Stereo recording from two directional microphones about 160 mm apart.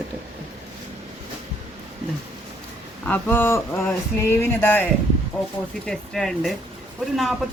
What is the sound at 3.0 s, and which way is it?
Speech, 10° left (ahead or behind).